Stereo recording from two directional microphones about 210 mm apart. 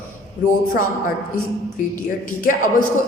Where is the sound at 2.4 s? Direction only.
40° left (ahead or behind).